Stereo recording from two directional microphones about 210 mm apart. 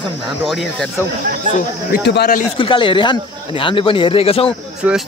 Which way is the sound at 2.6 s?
25° left (ahead or behind).